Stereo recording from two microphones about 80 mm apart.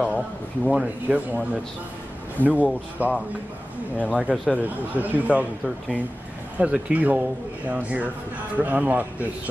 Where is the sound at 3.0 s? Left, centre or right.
Right.